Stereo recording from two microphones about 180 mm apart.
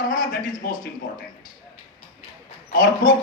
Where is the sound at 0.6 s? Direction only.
55° left (ahead or behind).